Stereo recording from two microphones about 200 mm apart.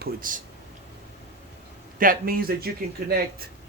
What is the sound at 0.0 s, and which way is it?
Speech, 45° right (ahead or behind).